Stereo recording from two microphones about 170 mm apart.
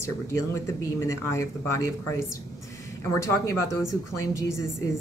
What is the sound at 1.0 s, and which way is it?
A woman's voice, 20° left (ahead or behind).